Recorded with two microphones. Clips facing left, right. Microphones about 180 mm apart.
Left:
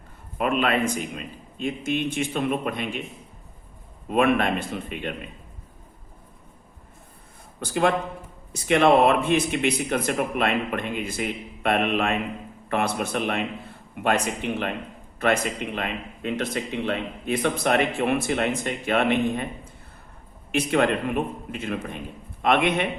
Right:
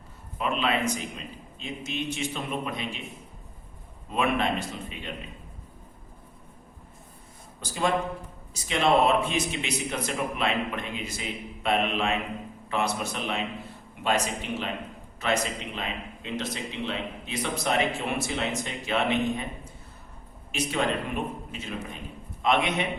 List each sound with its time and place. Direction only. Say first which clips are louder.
0.3 s speech: left 4 dB; 55° left (ahead or behind)
4.1 s speech: left 5 dB; 55° left (ahead or behind)
7.6 s speech: left 4 dB; 60° left (ahead or behind)
20.5 s speech: left 6 dB; 60° left (ahead or behind)